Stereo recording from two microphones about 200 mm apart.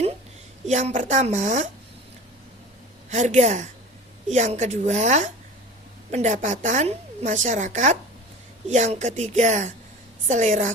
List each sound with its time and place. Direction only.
0.7 s a woman's voice: 35° right (ahead or behind)
3.1 s a woman's voice: 35° right (ahead or behind)